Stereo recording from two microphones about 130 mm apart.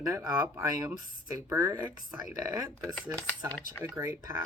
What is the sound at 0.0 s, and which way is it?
Speech, 25° right (ahead or behind).